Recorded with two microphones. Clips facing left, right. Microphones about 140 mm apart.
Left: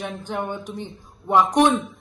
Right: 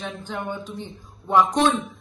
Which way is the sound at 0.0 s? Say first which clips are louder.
Left 3 dB; 15° left (ahead or behind).